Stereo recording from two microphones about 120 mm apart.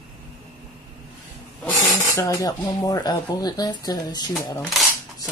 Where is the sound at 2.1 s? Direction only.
25° left (ahead or behind).